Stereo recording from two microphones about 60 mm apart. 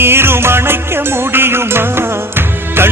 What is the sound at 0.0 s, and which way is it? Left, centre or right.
Music, right.